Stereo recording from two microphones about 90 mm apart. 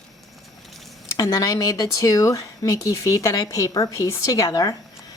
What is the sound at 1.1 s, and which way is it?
A woman's voice, 40° left (ahead or behind).